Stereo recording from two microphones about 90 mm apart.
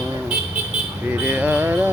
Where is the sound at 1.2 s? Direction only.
20° right (ahead or behind).